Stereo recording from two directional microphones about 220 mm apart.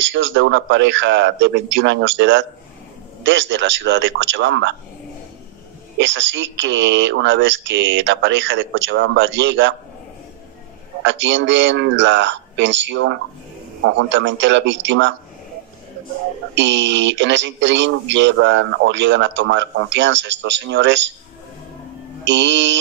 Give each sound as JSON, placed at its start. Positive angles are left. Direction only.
{"t": 0.0, "sound": "speech", "side_deg": -55}
{"t": 5.9, "sound": "speech", "side_deg": -55}
{"t": 11.1, "sound": "speech", "side_deg": -55}
{"t": 16.5, "sound": "speech", "side_deg": -55}
{"t": 22.2, "sound": "speech", "side_deg": -55}